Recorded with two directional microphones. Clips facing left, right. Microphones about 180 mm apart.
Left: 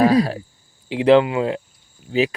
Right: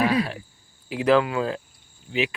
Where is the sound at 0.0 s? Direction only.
35° left (ahead or behind).